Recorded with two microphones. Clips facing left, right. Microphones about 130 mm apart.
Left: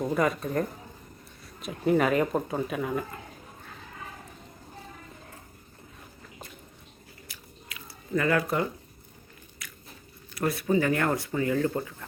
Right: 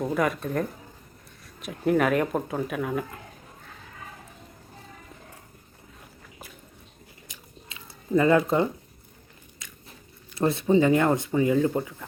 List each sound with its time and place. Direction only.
0.0 s speech: centre (ahead or behind)
7.3 s biting: 25° right (ahead or behind)
10.3 s speech: 25° right (ahead or behind)